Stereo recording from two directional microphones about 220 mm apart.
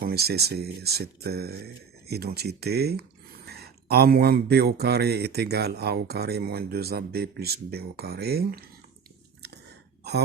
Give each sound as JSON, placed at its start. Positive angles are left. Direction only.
{"t": 0.0, "sound": "speech", "side_deg": -45}
{"t": 10.0, "sound": "throat clearing", "side_deg": -50}